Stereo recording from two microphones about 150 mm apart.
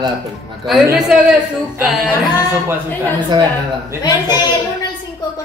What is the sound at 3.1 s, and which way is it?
Speech, 30° right (ahead or behind).